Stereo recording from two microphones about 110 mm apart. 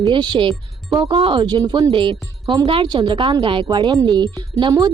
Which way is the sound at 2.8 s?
40° right (ahead or behind).